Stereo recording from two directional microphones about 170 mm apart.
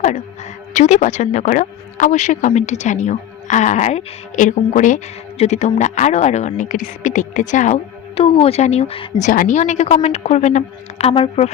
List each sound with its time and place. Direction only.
0.7 s speech: 45° left (ahead or behind)